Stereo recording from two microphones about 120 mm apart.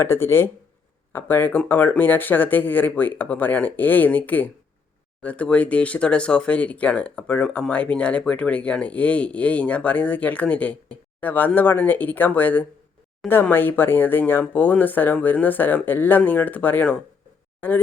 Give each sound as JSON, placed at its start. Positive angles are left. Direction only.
{"t": 0.0, "sound": "speech", "side_deg": 20}